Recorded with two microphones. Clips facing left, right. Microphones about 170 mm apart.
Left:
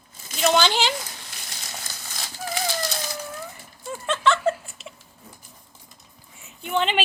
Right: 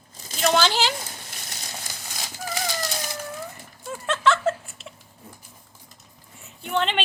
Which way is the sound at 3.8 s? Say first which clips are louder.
Even; centre (ahead or behind).